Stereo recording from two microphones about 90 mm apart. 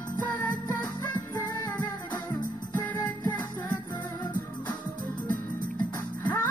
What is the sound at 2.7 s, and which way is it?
Music, 20° left (ahead or behind).